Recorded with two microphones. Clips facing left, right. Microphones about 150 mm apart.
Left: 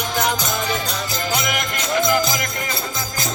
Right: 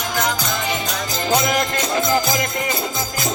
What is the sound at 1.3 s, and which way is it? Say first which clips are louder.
Music: right 8 dB; 30° right (ahead or behind).